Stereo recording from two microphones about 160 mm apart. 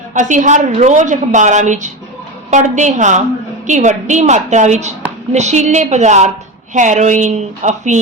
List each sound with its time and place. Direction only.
0.1 s a woman's voice: 50° right (ahead or behind)